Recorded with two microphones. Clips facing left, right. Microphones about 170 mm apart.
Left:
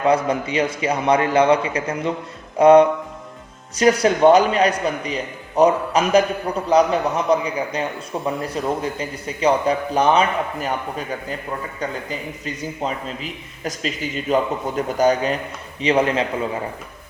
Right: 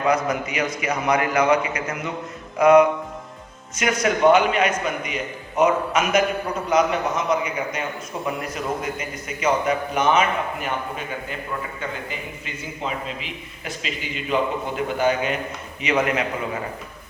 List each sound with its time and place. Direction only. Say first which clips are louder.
0.0 s a man's voice: left 3 dB; 30° left (ahead or behind)